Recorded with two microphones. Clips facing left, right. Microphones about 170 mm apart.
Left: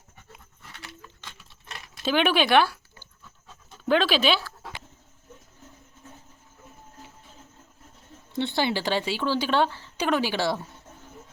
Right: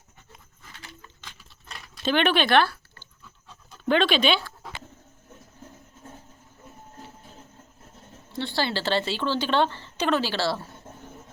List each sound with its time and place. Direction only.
2.0 s speech: 10° left (ahead or behind)
8.3 s a woman's voice: 20° left (ahead or behind)